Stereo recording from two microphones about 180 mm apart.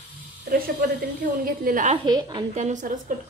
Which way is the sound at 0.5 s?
55° right (ahead or behind).